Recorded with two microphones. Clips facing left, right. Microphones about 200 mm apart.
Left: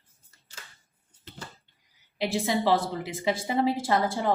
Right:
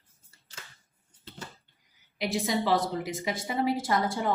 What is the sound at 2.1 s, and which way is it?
A woman's voice, 30° left (ahead or behind).